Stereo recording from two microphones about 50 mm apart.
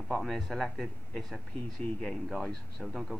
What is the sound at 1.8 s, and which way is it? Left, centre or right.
Speech, centre.